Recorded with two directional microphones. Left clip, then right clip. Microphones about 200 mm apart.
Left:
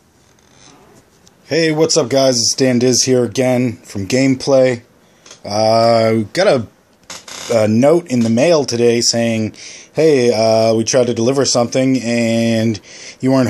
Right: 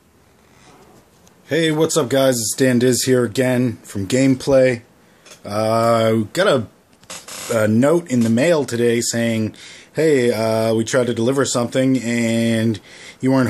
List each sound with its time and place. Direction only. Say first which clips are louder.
1.5 s speech: left 4 dB; centre (ahead or behind)